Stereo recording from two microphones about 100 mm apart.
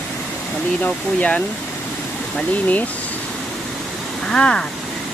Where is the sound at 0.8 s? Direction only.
15° left (ahead or behind).